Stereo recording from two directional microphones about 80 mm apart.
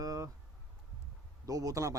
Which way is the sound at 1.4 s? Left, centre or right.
Right.